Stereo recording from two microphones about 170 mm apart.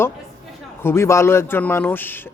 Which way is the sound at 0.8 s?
15° left (ahead or behind).